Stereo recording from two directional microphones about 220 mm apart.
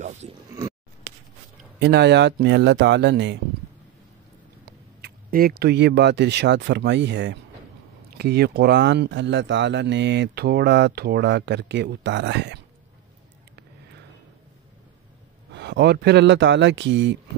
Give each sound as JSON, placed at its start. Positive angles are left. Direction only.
{"t": 0.0, "sound": "a sound", "side_deg": -30}
{"t": 1.8, "sound": "speech", "side_deg": -50}
{"t": 4.6, "sound": "speech", "side_deg": -45}
{"t": 15.5, "sound": "speech", "side_deg": -50}